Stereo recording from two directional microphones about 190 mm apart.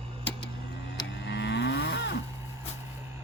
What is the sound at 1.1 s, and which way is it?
Cattle, 65° left (ahead or behind).